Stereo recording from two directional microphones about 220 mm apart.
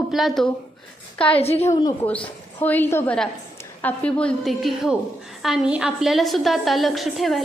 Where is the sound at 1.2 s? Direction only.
25° left (ahead or behind).